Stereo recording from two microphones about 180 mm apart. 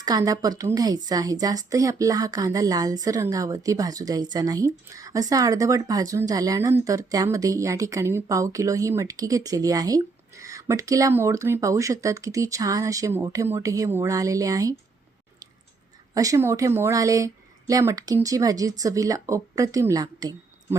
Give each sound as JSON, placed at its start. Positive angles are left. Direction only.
{"t": 0.0, "sound": "a woman's voice", "side_deg": -20}
{"t": 16.1, "sound": "a woman's voice", "side_deg": -20}